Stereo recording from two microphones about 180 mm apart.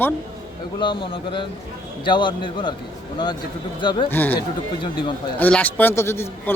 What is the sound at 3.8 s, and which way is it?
Speech, 25° left (ahead or behind).